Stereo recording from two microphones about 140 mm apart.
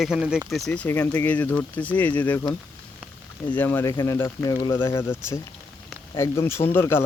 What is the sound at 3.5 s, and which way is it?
Speech, 15° left (ahead or behind).